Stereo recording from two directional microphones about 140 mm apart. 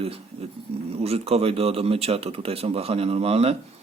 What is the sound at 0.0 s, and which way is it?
Speech, 45° right (ahead or behind).